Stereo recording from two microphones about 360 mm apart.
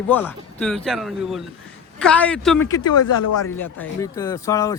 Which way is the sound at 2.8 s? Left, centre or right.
Left.